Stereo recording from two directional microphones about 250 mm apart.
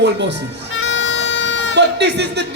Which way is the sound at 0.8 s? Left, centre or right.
Left.